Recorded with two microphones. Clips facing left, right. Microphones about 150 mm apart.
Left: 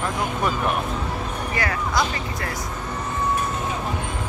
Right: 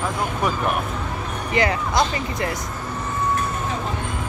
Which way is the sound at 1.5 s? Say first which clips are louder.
Right 5 dB; 20° right (ahead or behind).